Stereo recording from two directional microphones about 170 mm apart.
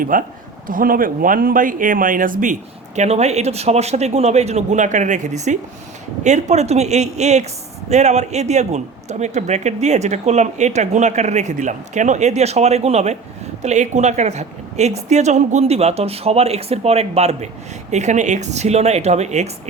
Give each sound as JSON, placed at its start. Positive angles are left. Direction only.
{"t": 0.0, "sound": "speech", "side_deg": -55}